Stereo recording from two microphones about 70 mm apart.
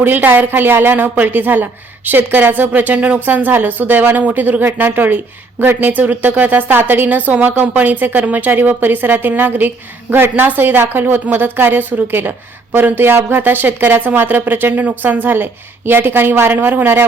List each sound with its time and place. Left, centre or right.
0.0 s a woman's voice: right